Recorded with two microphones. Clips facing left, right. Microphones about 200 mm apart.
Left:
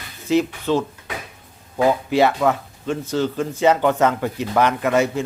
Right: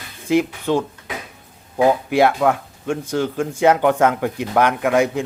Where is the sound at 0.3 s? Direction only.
15° right (ahead or behind).